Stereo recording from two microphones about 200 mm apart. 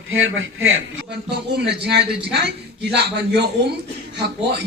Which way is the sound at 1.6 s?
55° right (ahead or behind).